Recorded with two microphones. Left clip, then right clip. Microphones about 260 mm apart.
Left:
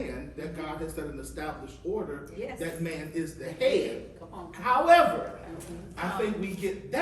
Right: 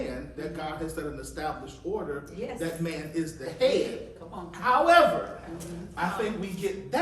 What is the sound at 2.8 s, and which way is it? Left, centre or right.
A man's voice, centre.